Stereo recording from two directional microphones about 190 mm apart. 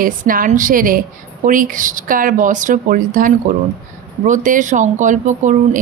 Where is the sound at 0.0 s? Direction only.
45° right (ahead or behind).